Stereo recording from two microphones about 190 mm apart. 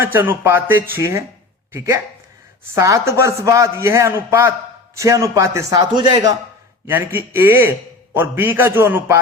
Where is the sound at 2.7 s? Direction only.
15° right (ahead or behind).